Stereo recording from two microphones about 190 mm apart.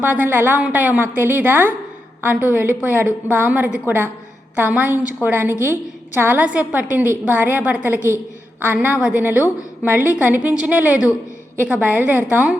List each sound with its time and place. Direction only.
0.0 s a woman's voice: 10° right (ahead or behind)